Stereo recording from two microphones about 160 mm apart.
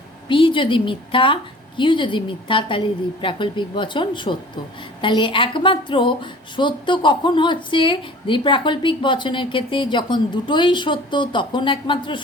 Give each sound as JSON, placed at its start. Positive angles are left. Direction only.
{"t": 0.3, "sound": "speech", "side_deg": 30}